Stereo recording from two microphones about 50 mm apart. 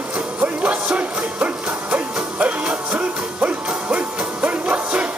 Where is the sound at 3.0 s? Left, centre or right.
Right.